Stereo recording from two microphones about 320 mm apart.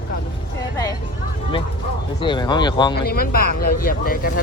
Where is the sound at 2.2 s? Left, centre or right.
Centre.